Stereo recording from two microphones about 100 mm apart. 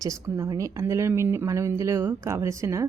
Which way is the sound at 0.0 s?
30° right (ahead or behind).